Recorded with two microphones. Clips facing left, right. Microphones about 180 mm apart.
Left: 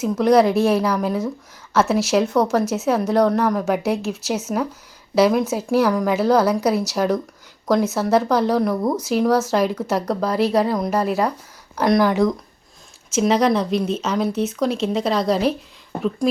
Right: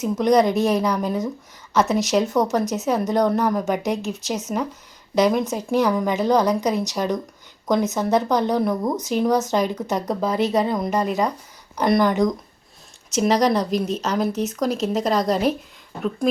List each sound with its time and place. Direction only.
0.0 s a woman's voice: centre (ahead or behind)
15.9 s speech: 60° left (ahead or behind)